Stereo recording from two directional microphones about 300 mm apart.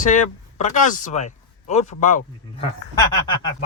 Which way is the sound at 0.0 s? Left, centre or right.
Left.